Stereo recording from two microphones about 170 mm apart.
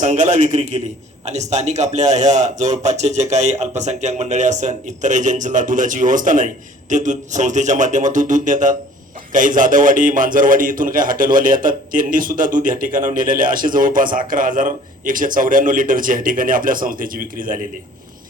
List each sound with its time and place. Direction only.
0.0 s a man's voice: 45° right (ahead or behind)